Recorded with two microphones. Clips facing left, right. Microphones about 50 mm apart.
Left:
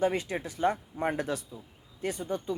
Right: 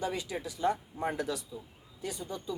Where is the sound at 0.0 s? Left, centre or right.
Left.